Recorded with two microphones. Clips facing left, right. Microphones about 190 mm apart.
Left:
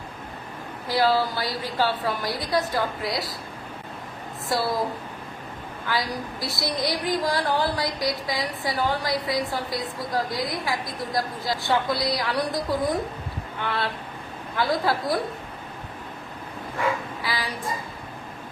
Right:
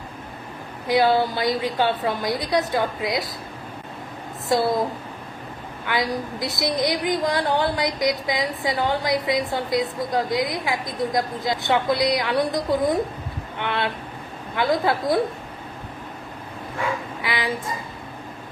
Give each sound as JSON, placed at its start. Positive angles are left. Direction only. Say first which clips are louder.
{"t": 0.9, "sound": "a woman's voice", "louder": "right 3 dB", "side_deg": -20}
{"t": 5.9, "sound": "a woman's voice", "louder": "right 4 dB", "side_deg": -20}
{"t": 17.2, "sound": "a woman's voice", "louder": "right 4 dB", "side_deg": -20}